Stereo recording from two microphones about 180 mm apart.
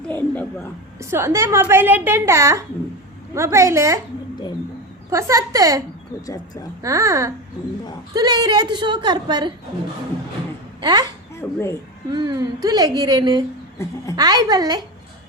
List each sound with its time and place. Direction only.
0.1 s a woman's voice: 10° left (ahead or behind)
0.9 s a woman's voice: 15° right (ahead or behind)
5.1 s a woman's voice: 15° right (ahead or behind)
6.2 s speech: 20° left (ahead or behind)
6.8 s a woman's voice: 20° right (ahead or behind)
10.8 s speech: 25° right (ahead or behind)
11.3 s speech: 15° left (ahead or behind)
12.1 s a woman's voice: 25° right (ahead or behind)
13.7 s a child's voice: 20° left (ahead or behind)
14.2 s a woman's voice: 25° right (ahead or behind)